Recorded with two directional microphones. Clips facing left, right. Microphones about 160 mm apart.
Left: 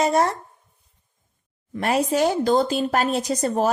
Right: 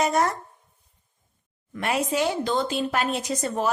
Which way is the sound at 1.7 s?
35° left (ahead or behind).